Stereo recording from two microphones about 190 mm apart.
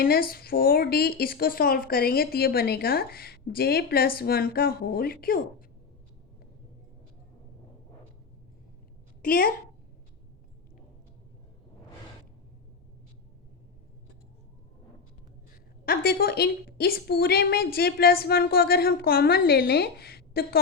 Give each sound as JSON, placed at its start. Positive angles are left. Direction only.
{"t": 0.0, "sound": "speech", "side_deg": 50}
{"t": 9.2, "sound": "speech", "side_deg": 50}
{"t": 15.9, "sound": "a woman's voice", "side_deg": 50}